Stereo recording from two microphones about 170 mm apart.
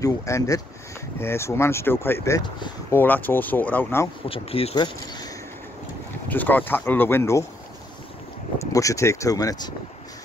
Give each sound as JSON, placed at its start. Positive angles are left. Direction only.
{"t": 0.0, "sound": "speech", "side_deg": 20}
{"t": 2.9, "sound": "speech", "side_deg": 10}
{"t": 4.3, "sound": "speech", "side_deg": 35}
{"t": 6.2, "sound": "speech", "side_deg": 10}
{"t": 8.7, "sound": "speech", "side_deg": 20}